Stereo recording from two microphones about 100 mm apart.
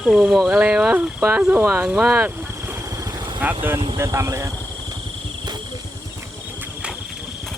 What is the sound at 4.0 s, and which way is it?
Speech, 30° right (ahead or behind).